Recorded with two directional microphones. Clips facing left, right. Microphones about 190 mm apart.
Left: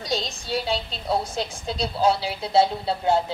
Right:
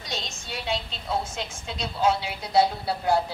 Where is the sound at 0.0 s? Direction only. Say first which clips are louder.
Left 7 dB; 35° left (ahead or behind).